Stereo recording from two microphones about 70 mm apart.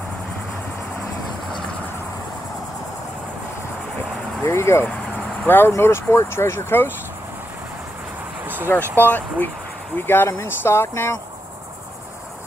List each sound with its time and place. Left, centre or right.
4.5 s speech: left
8.9 s speech: left